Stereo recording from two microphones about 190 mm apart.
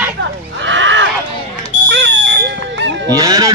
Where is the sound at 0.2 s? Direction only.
75° right (ahead or behind).